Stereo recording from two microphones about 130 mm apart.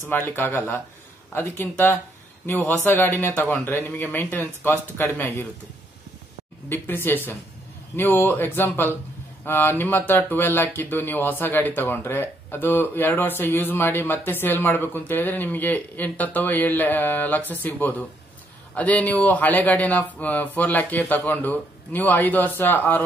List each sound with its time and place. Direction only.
0.1 s speech: 15° left (ahead or behind)
6.7 s speech: 15° left (ahead or behind)